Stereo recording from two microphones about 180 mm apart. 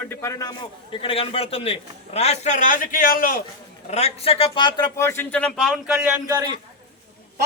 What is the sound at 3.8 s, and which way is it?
A man's voice, 35° left (ahead or behind).